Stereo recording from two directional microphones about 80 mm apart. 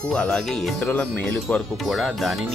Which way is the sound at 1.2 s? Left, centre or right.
Centre.